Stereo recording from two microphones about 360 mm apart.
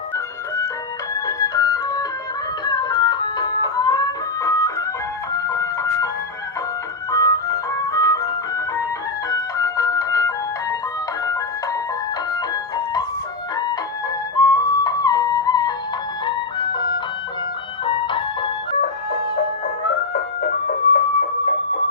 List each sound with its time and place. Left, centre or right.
1.1 s music: centre
7.1 s music: centre
12.3 s music: centre
14.5 s music: centre
18.8 s music: left